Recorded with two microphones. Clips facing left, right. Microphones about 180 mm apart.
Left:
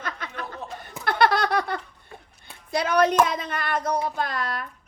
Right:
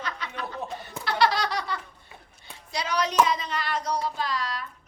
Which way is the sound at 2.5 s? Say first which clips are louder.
Left 6 dB; 55° left (ahead or behind).